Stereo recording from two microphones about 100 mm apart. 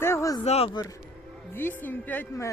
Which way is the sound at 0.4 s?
90° left.